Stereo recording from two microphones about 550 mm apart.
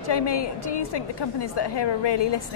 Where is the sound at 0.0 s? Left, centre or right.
Left.